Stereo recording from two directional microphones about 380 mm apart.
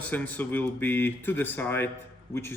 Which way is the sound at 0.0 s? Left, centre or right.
Centre.